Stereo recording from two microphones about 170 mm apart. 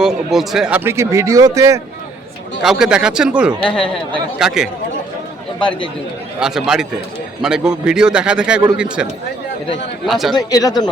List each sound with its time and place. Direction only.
0.0 s a man's voice: 5° right (ahead or behind)
0.9 s speech: 15° right (ahead or behind)
2.6 s a man's voice: 5° right (ahead or behind)
5.5 s speech: 30° left (ahead or behind)
6.4 s a man's voice: 5° right (ahead or behind)
10.1 s a man's voice: centre (ahead or behind)
10.3 s speech: 20° left (ahead or behind)